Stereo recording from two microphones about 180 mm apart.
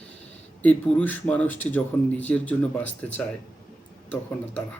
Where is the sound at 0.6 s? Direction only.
10° left (ahead or behind).